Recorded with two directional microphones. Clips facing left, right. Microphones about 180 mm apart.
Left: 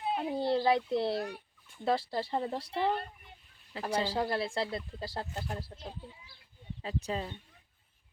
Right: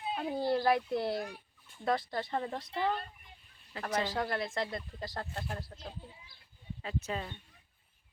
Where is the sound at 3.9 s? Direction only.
30° left (ahead or behind).